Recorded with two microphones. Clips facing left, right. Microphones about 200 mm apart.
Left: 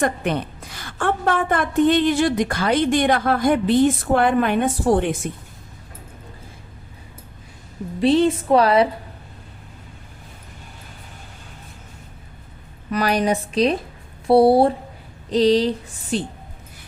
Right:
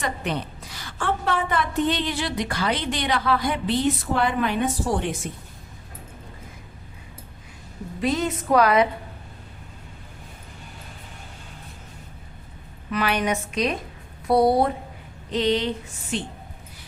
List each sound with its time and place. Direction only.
0.0 s a woman's voice: 55° left (ahead or behind)
8.0 s a woman's voice: 30° left (ahead or behind)
12.9 s a woman's voice: 40° left (ahead or behind)